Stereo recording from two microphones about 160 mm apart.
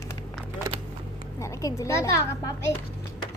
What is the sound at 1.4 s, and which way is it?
A woman's voice, 20° left (ahead or behind).